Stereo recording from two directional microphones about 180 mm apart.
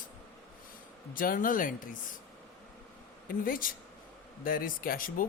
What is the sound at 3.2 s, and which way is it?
Speech, 50° left (ahead or behind).